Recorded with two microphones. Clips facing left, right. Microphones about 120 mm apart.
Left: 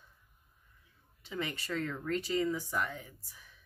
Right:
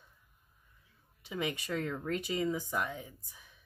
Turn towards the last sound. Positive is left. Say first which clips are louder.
# right 1 dB
turn(degrees=-15)  # may be behind; listen again after turning